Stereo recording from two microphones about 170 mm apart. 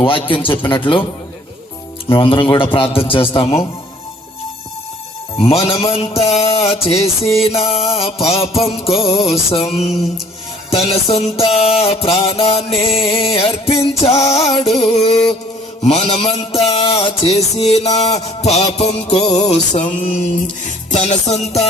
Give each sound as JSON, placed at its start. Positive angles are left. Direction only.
{"t": 0.0, "sound": "a man's voice", "side_deg": 30}
{"t": 2.0, "sound": "music", "side_deg": 30}
{"t": 5.4, "sound": "music", "side_deg": 35}
{"t": 20.9, "sound": "music", "side_deg": 40}